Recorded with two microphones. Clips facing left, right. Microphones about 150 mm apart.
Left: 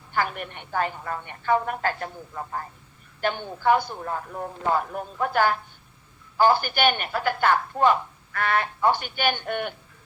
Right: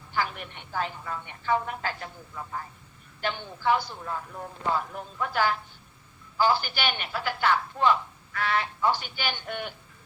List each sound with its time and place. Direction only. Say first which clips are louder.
0.1 s a man's voice: left 3 dB; 55° left (ahead or behind)